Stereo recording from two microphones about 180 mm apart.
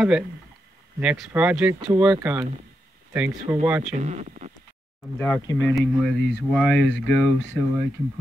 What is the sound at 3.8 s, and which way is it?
Speech, 40° right (ahead or behind).